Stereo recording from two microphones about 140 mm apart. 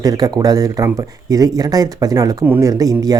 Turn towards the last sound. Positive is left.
turn(degrees=-25)  # may be behind; listen again after turning